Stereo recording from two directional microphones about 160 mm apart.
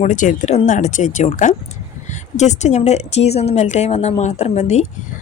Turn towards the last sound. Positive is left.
turn(degrees=45)  # may be behind; listen again after turning